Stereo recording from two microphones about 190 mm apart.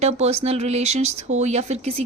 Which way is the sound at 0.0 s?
35° right (ahead or behind).